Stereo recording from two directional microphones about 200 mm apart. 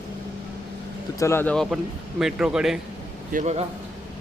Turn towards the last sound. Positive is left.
turn(degrees=-35)  # may be behind; listen again after turning